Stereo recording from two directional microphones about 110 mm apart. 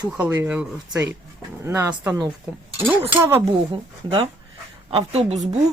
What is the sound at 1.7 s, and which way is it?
Speech, 20° right (ahead or behind).